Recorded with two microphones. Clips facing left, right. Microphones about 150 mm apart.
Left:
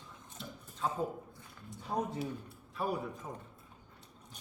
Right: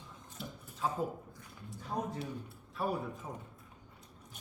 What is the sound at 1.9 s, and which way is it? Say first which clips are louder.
Speech: left 2 dB; 20° left (ahead or behind).